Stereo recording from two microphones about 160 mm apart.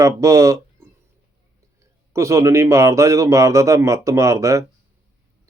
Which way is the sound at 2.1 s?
20° right (ahead or behind).